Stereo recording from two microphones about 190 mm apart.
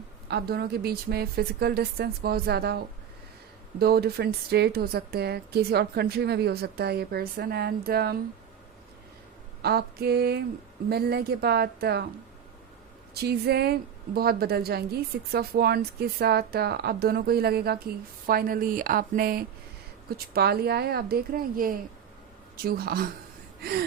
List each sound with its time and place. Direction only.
0.3 s a woman's voice: 55° right (ahead or behind)
9.6 s a woman's voice: 55° right (ahead or behind)
13.1 s a woman's voice: 55° right (ahead or behind)